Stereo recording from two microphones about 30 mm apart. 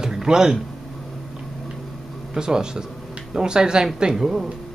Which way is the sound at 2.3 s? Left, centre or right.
Right.